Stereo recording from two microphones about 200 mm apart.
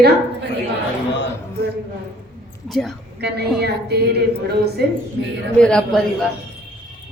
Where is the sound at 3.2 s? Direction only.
55° right (ahead or behind).